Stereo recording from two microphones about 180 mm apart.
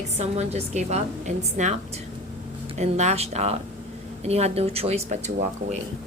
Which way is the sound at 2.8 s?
40° right (ahead or behind).